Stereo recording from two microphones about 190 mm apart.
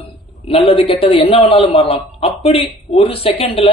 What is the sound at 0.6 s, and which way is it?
A man's voice, 30° left (ahead or behind).